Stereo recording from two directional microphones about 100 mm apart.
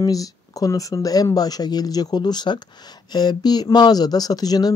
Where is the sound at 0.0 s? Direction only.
35° left (ahead or behind).